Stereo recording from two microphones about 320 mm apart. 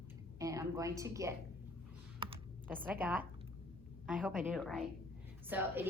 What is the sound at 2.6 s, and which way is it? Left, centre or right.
Speech, centre.